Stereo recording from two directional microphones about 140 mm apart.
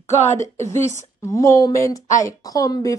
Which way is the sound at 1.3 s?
25° left (ahead or behind).